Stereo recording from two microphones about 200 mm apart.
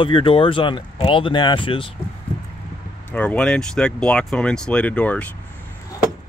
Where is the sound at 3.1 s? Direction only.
5° left (ahead or behind).